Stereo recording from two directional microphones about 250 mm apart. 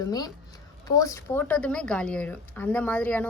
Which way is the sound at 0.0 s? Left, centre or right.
Centre.